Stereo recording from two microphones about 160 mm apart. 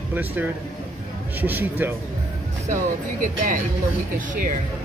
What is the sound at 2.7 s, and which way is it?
Speech, 55° right (ahead or behind).